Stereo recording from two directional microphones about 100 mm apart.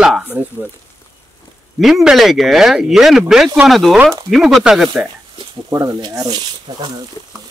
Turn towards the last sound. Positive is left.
turn(degrees=-45)  # may be behind; listen again after turning